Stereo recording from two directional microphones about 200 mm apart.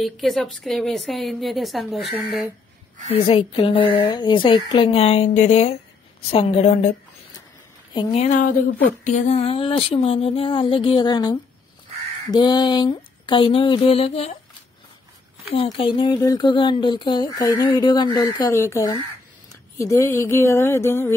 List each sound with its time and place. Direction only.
0.0 s a woman's voice: centre (ahead or behind)
3.1 s a woman's voice: 30° left (ahead or behind)
15.5 s speech: 25° left (ahead or behind)